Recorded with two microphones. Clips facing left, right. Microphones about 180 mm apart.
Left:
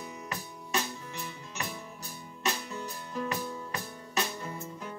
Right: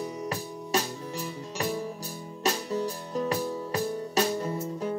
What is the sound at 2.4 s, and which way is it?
Music, 40° right (ahead or behind).